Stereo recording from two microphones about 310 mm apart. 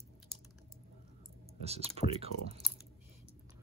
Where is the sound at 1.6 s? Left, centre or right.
Centre.